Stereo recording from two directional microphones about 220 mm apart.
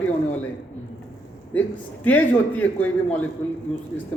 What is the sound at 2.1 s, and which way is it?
A man's voice, 5° left (ahead or behind).